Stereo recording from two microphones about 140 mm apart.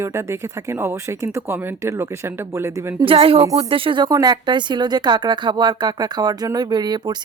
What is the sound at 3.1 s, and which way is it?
Speech, 40° right (ahead or behind).